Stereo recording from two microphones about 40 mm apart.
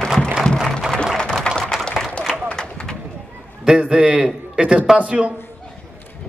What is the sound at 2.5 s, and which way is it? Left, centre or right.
Bird, centre.